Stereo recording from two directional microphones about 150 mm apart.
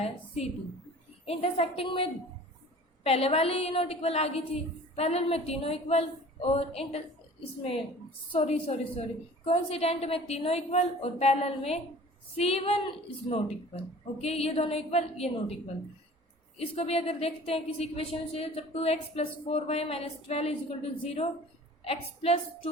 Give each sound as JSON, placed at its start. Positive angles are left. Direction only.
{"t": 1.2, "sound": "a woman's voice", "side_deg": 40}
{"t": 8.3, "sound": "a woman's voice", "side_deg": 40}
{"t": 16.6, "sound": "a woman's voice", "side_deg": 40}